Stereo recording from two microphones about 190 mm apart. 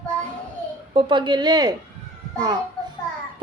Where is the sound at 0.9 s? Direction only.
25° right (ahead or behind).